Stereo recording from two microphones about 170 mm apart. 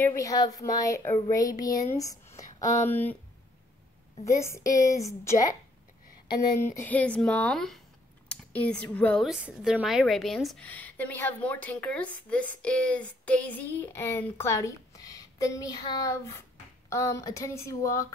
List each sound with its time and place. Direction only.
0.0 s a woman's voice: 20° left (ahead or behind)
4.3 s a woman's voice: 15° left (ahead or behind)
6.6 s a woman's voice: 10° left (ahead or behind)
9.3 s a woman's voice: 5° right (ahead or behind); by 18.0 s 15° left (ahead or behind)